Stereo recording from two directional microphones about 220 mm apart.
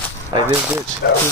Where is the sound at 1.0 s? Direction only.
45° left (ahead or behind).